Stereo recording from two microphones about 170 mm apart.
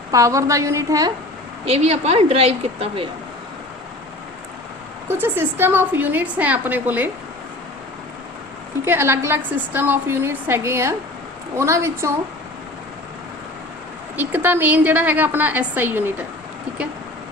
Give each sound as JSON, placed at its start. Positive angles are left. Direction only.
{"t": 0.1, "sound": "a woman's voice", "side_deg": -20}
{"t": 1.6, "sound": "speech", "side_deg": -35}
{"t": 5.0, "sound": "a woman's voice", "side_deg": -10}
{"t": 8.8, "sound": "a woman's voice", "side_deg": -15}
{"t": 14.2, "sound": "a woman's voice", "side_deg": -10}